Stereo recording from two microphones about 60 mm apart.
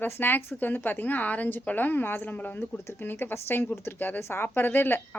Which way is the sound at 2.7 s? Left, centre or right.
Left.